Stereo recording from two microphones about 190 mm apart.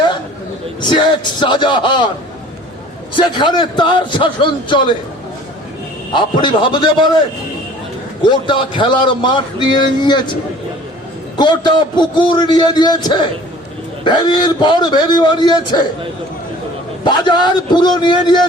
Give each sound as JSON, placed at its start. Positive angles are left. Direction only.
{"t": 0.8, "sound": "a man's voice", "side_deg": 25}
{"t": 3.2, "sound": "a man's voice", "side_deg": 25}
{"t": 6.1, "sound": "a man's voice", "side_deg": 25}
{"t": 8.2, "sound": "a man's voice", "side_deg": 25}
{"t": 11.3, "sound": "a man's voice", "side_deg": 25}
{"t": 17.0, "sound": "a man's voice", "side_deg": 25}